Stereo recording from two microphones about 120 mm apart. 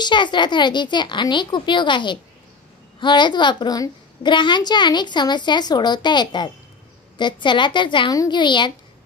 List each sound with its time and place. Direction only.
0.0 s a woman's voice: 40° left (ahead or behind)